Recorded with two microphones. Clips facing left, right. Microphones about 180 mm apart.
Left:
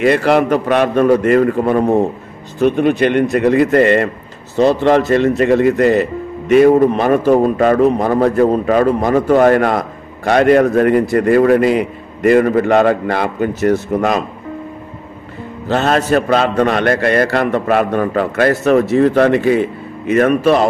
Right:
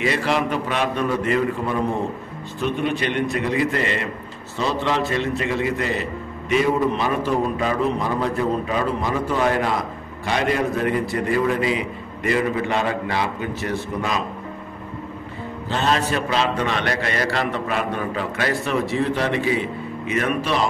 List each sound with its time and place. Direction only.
0.0 s a man's voice: 55° left (ahead or behind)
15.7 s a man's voice: 55° left (ahead or behind)
16.0 s a man's voice: 45° left (ahead or behind)